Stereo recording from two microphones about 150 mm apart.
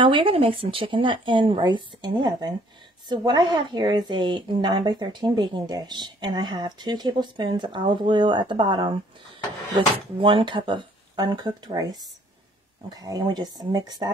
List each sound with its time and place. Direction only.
0.0 s a woman's voice: 35° right (ahead or behind)